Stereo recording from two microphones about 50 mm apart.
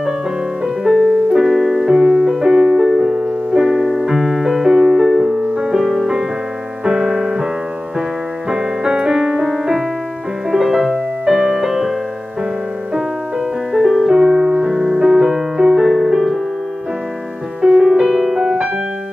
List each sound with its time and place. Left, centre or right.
0.8 s music: centre
6.8 s piano: centre
8.5 s keyboard: centre
9.5 s music: centre
13.7 s music: centre
14.3 s music: centre
17.6 s music: centre